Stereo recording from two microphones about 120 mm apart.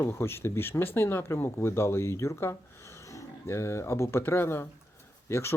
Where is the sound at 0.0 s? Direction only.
20° left (ahead or behind).